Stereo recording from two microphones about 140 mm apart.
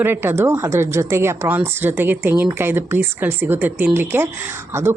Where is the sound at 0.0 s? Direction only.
15° right (ahead or behind).